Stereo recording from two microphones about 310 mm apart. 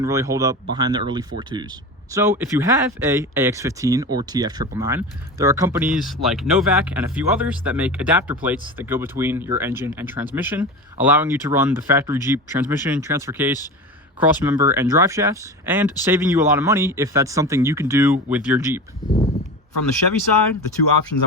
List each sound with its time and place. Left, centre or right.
0.0 s speech: centre
19.0 s a sound: centre
20.0 s speech: left
21.1 s speech: left